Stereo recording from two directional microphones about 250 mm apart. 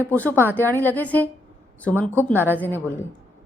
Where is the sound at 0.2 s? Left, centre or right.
Centre.